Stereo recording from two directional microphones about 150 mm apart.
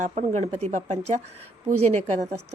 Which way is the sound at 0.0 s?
55° right (ahead or behind).